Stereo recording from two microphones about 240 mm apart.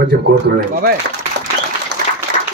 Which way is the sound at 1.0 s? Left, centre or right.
Right.